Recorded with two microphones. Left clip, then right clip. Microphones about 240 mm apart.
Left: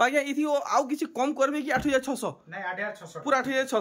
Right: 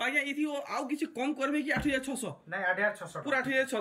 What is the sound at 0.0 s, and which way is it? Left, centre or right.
Speech, left.